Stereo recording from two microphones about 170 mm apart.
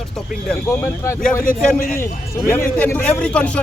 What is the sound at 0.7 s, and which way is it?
Speech, 15° left (ahead or behind).